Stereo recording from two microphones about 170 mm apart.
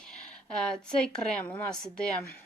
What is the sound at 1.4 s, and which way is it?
Speech, 5° left (ahead or behind).